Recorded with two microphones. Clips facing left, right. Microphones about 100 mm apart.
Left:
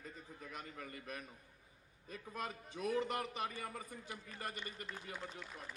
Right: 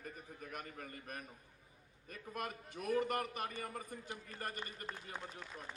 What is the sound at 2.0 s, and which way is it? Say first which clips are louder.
A man's voice: right 1 dB; 55° right (ahead or behind).